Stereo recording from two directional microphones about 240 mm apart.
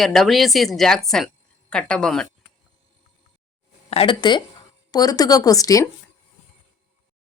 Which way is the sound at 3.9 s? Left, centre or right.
Left.